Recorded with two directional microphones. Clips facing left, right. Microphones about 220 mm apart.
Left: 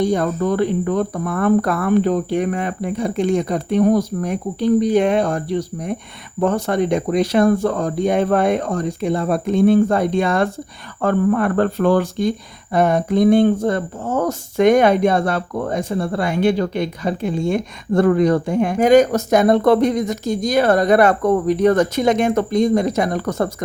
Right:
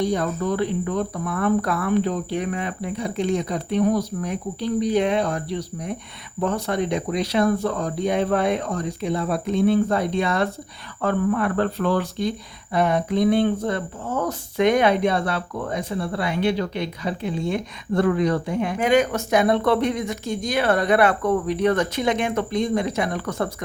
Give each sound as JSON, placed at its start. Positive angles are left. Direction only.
{"t": 0.0, "sound": "speech", "side_deg": 50}